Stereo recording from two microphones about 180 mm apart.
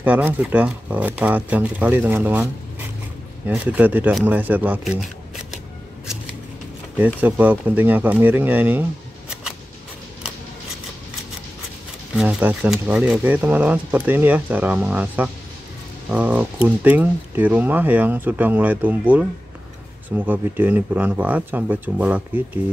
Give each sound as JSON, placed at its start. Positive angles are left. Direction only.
{"t": 0.0, "sound": "speech", "side_deg": -10}
{"t": 7.0, "sound": "speech", "side_deg": -10}
{"t": 12.2, "sound": "speech", "side_deg": -10}